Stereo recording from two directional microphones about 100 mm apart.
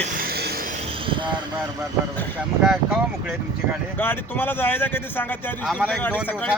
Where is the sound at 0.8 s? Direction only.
70° right (ahead or behind).